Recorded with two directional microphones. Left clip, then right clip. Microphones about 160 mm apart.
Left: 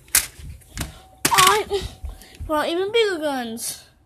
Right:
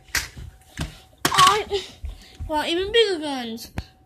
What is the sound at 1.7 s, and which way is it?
Speech, 35° left (ahead or behind).